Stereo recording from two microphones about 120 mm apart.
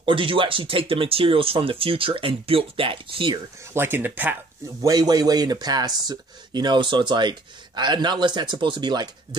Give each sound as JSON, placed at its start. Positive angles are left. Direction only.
{"t": 0.0, "sound": "speech", "side_deg": -45}
{"t": 3.7, "sound": "speech", "side_deg": -20}
{"t": 4.8, "sound": "speech", "side_deg": -35}